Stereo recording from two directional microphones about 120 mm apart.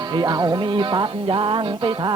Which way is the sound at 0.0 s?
35° right (ahead or behind).